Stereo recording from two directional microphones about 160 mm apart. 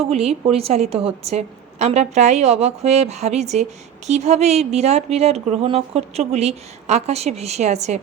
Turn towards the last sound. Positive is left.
turn(degrees=-45)  # may be behind; listen again after turning